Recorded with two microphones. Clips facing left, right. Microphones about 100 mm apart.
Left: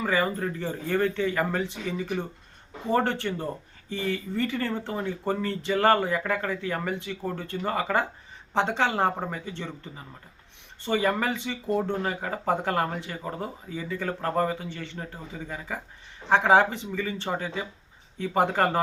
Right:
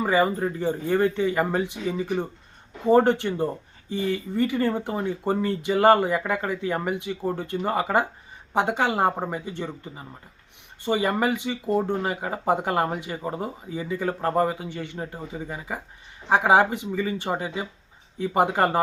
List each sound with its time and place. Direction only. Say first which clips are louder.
0.0 s speech: right 4 dB; 15° right (ahead or behind)